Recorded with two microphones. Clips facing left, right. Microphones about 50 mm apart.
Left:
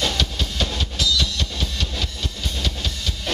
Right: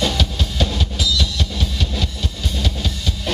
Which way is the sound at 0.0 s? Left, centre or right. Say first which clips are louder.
Right 3 dB; centre.